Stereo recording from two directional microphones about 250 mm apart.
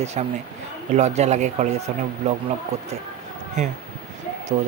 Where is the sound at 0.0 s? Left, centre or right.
Right.